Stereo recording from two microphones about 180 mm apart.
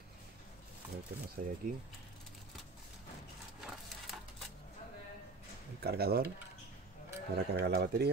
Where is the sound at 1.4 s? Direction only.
50° right (ahead or behind).